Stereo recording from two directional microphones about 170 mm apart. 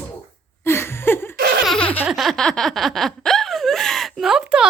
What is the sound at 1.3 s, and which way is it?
Laughter, 65° right (ahead or behind).